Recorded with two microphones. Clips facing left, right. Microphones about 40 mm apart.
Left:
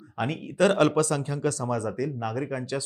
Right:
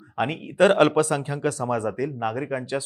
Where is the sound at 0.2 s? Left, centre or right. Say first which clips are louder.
Right 4 dB; right.